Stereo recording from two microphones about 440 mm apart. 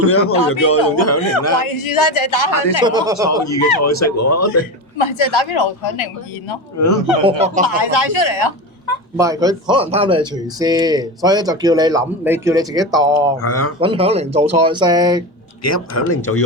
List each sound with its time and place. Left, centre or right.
0.1 s speech: left
1.6 s a woman's voice: left
2.8 s speech: centre
3.4 s speech: left
4.9 s a woman's voice: left
6.7 s speech: left
7.3 s speech: centre
7.8 s a woman's voice: left
9.1 s speech: centre
13.4 s speech: left
13.8 s speech: centre
15.6 s speech: left